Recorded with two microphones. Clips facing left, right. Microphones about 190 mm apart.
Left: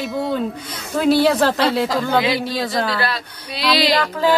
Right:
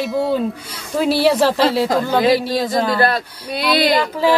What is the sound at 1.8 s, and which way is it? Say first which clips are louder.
Speech: right 4 dB; 45° right (ahead or behind).